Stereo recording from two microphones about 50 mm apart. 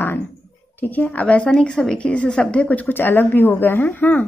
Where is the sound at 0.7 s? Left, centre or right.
Left.